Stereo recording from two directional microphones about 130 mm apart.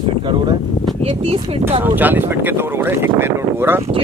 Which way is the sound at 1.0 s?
45° right (ahead or behind).